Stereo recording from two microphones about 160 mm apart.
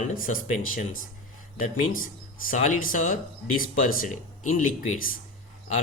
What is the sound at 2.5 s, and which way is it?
Speech, 60° left (ahead or behind).